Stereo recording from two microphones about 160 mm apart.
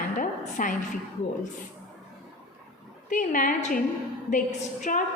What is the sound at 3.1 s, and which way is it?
A woman's voice, 55° left (ahead or behind).